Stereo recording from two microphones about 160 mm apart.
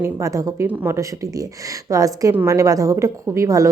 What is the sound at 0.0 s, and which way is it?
A woman's voice, 20° right (ahead or behind).